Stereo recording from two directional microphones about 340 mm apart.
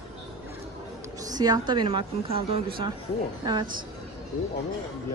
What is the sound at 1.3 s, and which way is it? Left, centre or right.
Speech, centre.